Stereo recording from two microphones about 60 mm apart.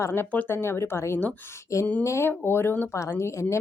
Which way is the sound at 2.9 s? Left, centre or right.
Left.